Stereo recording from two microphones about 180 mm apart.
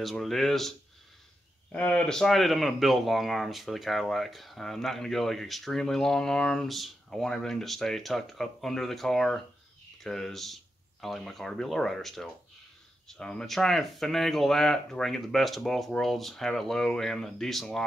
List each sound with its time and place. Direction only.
0.0 s speech: centre (ahead or behind)